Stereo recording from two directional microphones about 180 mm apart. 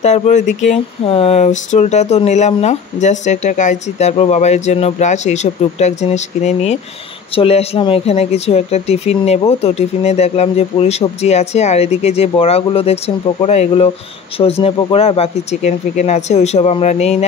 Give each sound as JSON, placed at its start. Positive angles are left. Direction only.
{"t": 0.0, "sound": "speech", "side_deg": 40}